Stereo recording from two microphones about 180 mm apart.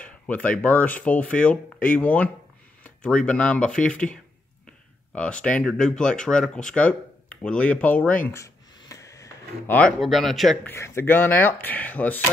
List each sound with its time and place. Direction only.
0.0 s speech: 10° left (ahead or behind)
8.3 s a sound: 15° left (ahead or behind)
9.8 s speech: centre (ahead or behind)